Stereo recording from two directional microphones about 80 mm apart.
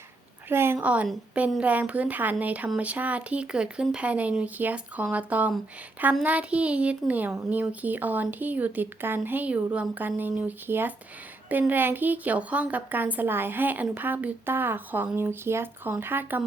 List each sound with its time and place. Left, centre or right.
0.4 s a woman's voice: right
0.8 s a woman's voice: centre